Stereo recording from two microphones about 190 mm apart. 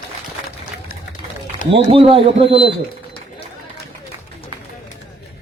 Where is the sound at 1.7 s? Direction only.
30° right (ahead or behind).